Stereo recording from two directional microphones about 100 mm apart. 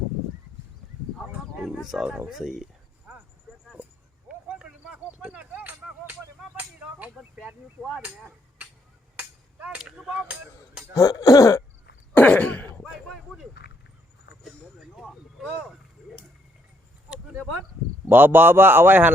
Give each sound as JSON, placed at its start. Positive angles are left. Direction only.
{"t": 1.8, "sound": "speech", "side_deg": -5}
{"t": 4.3, "sound": "a sound", "side_deg": -10}
{"t": 7.3, "sound": "speech", "side_deg": -5}
{"t": 9.1, "sound": "a sound", "side_deg": -15}
{"t": 10.1, "sound": "speech", "side_deg": -15}
{"t": 10.9, "sound": "throat clearing", "side_deg": 35}
{"t": 12.1, "sound": "cough", "side_deg": 15}
{"t": 12.8, "sound": "a sound", "side_deg": 0}
{"t": 18.1, "sound": "a man's voice", "side_deg": -20}